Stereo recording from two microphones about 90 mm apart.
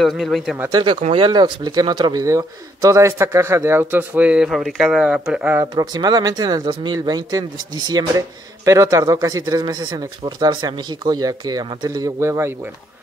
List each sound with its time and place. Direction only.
0.0 s speech: centre (ahead or behind)
0.7 s speech: 50° right (ahead or behind)
1.1 s speech: 60° right (ahead or behind)
2.2 s a man's voice: 35° right (ahead or behind); by 4.5 s 15° right (ahead or behind)
4.5 s speech: centre (ahead or behind)
5.8 s speech: 45° right (ahead or behind)
8.6 s speech: 35° right (ahead or behind)
10.5 s a man's voice: 60° right (ahead or behind); by 12.5 s 35° right (ahead or behind)